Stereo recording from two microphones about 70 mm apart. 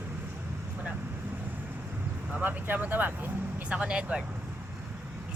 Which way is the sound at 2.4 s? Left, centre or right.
Right.